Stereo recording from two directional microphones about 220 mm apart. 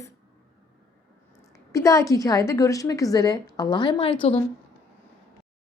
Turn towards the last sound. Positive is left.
turn(degrees=25)  # may be behind; listen again after turning